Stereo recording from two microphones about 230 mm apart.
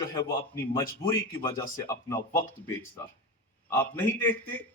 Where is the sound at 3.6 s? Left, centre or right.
Centre.